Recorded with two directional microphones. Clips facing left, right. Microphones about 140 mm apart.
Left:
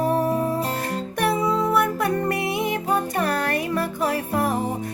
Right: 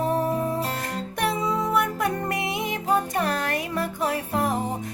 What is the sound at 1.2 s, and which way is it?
Music, 20° right (ahead or behind).